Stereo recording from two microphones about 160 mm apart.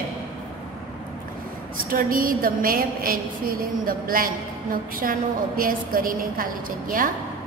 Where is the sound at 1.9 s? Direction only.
60° right (ahead or behind).